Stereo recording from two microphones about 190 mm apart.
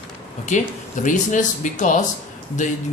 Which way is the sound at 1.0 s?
40° left (ahead or behind).